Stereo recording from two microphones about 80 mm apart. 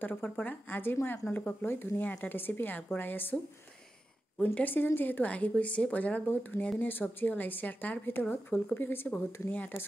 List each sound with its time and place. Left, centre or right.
0.0 s a woman's voice: left
4.6 s a woman's voice: left